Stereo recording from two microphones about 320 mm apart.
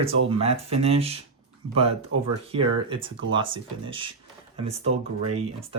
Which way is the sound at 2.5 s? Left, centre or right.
Centre.